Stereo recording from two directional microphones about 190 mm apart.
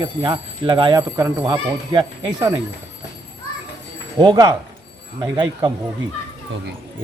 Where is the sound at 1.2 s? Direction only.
15° right (ahead or behind).